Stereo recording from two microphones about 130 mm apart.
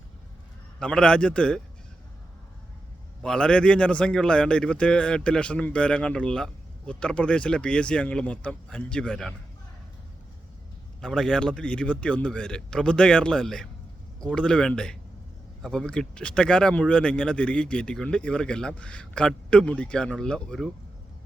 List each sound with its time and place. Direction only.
0.8 s a man's voice: 5° left (ahead or behind)
3.2 s a man's voice: 5° left (ahead or behind)
11.0 s a man's voice: 5° left (ahead or behind)